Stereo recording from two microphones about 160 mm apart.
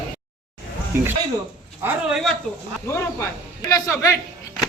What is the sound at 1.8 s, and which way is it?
Speech, 5° right (ahead or behind).